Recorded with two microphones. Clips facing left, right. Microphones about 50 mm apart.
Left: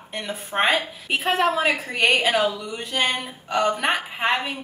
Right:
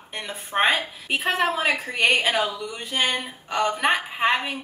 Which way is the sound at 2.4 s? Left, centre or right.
Centre.